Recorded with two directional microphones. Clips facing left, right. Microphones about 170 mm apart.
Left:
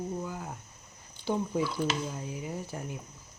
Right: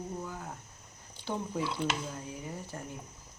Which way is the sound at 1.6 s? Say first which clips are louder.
Left 3 dB; 25° right (ahead or behind).